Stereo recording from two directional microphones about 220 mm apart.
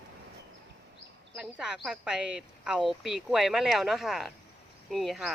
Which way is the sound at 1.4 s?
5° right (ahead or behind).